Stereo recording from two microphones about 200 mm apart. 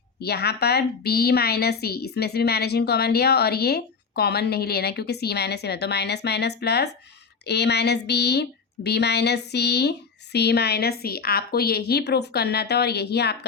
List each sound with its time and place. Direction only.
0.2 s a woman's voice: 55° left (ahead or behind)